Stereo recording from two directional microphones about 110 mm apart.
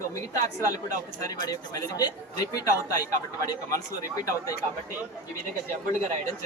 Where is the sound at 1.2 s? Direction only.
35° left (ahead or behind).